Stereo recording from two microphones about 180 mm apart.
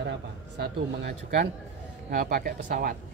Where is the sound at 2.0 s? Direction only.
50° right (ahead or behind).